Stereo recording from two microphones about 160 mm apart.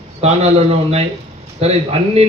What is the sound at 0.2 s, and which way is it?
A man's voice, 40° right (ahead or behind).